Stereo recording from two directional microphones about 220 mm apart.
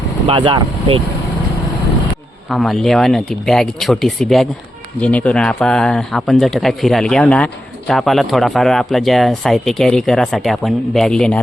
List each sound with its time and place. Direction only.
0.3 s speech: 25° right (ahead or behind)
2.5 s speech: centre (ahead or behind)